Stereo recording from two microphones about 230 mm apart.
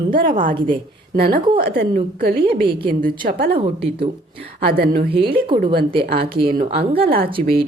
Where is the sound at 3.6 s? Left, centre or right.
Right.